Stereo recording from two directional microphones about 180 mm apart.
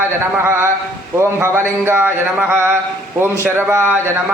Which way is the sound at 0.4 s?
15° right (ahead or behind).